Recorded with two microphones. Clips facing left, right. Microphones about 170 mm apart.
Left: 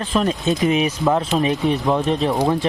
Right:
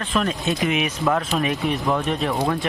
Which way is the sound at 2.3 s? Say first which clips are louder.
Left 4 dB; 20° left (ahead or behind).